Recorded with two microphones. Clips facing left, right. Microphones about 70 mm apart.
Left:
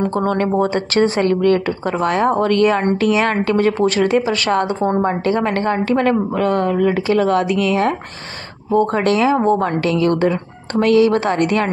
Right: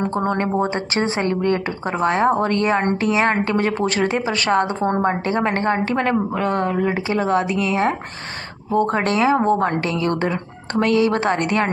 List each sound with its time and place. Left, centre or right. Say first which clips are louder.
0.0 s a woman's voice: left 3 dB; right